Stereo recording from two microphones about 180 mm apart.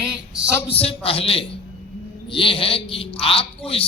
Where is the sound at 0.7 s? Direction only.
35° left (ahead or behind).